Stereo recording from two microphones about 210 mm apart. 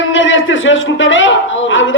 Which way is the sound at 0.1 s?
65° left (ahead or behind).